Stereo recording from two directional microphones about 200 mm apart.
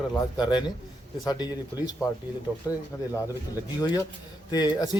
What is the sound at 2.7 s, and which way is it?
Speech, 15° left (ahead or behind).